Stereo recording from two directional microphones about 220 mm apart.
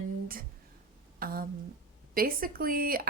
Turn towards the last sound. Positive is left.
turn(degrees=-40)  # may be behind; listen again after turning